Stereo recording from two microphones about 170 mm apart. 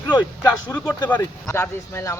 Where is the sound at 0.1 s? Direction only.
25° left (ahead or behind).